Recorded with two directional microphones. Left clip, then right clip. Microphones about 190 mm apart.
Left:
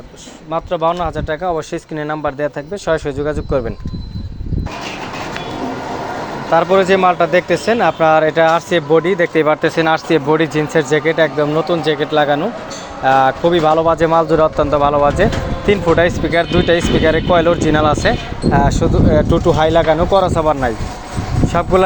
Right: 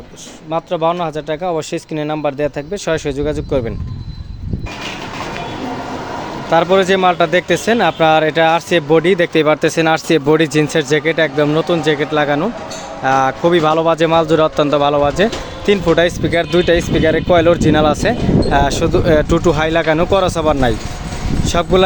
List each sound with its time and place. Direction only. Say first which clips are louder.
0.5 s speech: even; 20° right (ahead or behind)
6.5 s speech: even; 25° right (ahead or behind)
20.3 s speech: even; 35° right (ahead or behind)